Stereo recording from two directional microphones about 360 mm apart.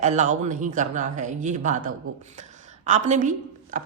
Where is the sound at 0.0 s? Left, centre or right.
Centre.